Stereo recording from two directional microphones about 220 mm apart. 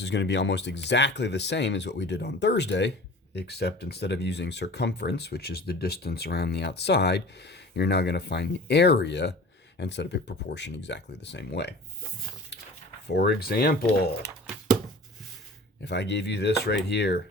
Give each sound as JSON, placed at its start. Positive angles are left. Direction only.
{"t": 0.0, "sound": "speech", "side_deg": 50}
{"t": 13.1, "sound": "speech", "side_deg": 50}
{"t": 15.8, "sound": "speech", "side_deg": 50}